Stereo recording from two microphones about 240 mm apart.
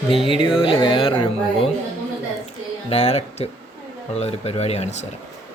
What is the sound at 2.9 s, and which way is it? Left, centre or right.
Music, left.